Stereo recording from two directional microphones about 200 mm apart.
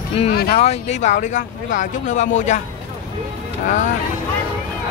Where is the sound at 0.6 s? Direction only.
35° left (ahead or behind).